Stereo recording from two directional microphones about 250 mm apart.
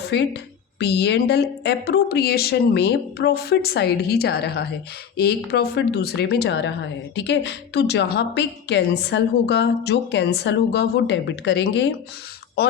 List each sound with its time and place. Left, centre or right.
0.0 s a woman's voice: left